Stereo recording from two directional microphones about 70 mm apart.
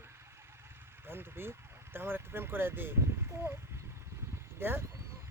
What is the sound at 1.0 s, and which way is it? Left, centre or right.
Speech, right.